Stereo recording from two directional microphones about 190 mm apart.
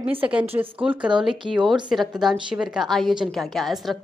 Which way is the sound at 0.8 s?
25° right (ahead or behind).